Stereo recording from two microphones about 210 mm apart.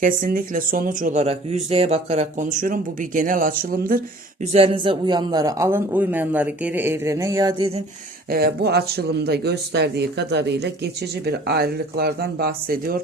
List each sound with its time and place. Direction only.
0.0 s speech: 40° right (ahead or behind)
4.5 s a man's voice: 25° right (ahead or behind)
8.3 s speech: 45° right (ahead or behind)